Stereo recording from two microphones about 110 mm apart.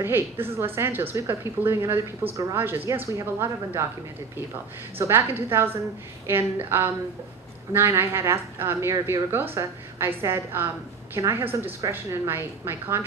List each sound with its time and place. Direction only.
0.0 s a woman's voice: 20° right (ahead or behind)
4.9 s a woman's voice: 20° right (ahead or behind)